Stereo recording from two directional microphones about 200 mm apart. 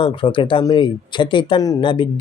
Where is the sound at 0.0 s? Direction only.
25° left (ahead or behind).